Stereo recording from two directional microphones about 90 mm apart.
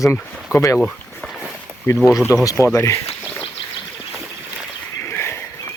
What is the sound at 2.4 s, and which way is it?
Speech, 35° left (ahead or behind).